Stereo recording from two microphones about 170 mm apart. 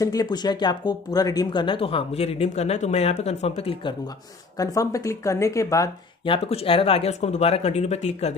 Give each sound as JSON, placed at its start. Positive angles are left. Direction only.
{"t": 0.0, "sound": "speech", "side_deg": 20}
{"t": 4.6, "sound": "speech", "side_deg": 20}
{"t": 6.2, "sound": "speech", "side_deg": 35}